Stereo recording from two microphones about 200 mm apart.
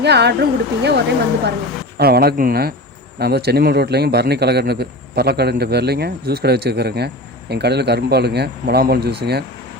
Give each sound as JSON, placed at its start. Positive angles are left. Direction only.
{"t": 0.0, "sound": "speech", "side_deg": -55}
{"t": 2.0, "sound": "a man's voice", "side_deg": -50}